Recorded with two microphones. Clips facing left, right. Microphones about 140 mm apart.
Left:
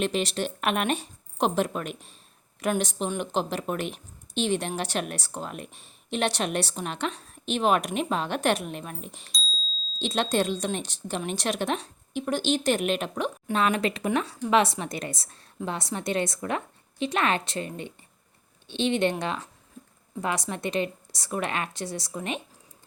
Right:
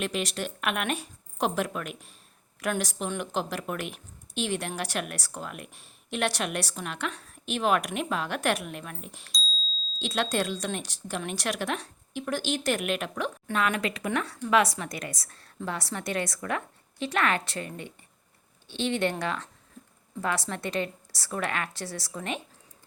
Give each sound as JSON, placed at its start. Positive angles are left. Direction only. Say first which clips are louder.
{"t": 0.0, "sound": "a woman's voice", "louder": "left 4 dB", "side_deg": 30}
{"t": 20.2, "sound": "a woman's voice", "louder": "left 1 dB", "side_deg": 20}